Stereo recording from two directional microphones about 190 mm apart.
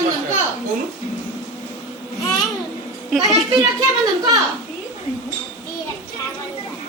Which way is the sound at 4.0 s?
20° right (ahead or behind).